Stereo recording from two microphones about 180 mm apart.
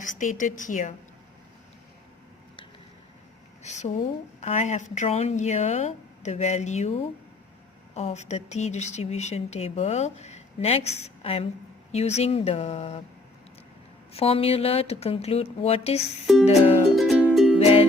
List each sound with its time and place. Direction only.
0.0 s a woman's voice: 45° left (ahead or behind)
3.6 s speech: 40° left (ahead or behind)
14.1 s speech: 35° left (ahead or behind)
16.2 s music: centre (ahead or behind)
17.6 s music: 35° left (ahead or behind)